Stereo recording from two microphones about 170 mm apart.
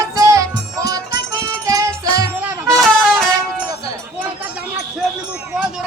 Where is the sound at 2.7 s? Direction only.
Centre (ahead or behind).